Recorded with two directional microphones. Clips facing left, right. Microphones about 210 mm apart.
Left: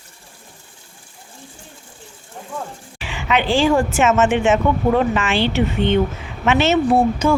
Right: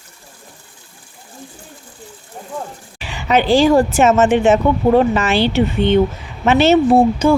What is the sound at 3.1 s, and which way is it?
Speech, 40° right (ahead or behind).